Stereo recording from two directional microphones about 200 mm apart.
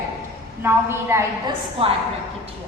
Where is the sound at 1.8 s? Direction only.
30° right (ahead or behind).